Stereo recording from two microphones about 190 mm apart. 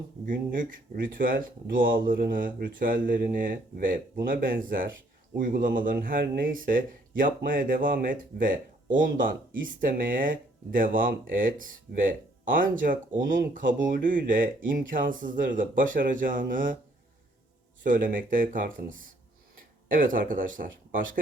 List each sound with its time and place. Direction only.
0.3 s speech: 45° right (ahead or behind)
17.8 s speech: 45° right (ahead or behind)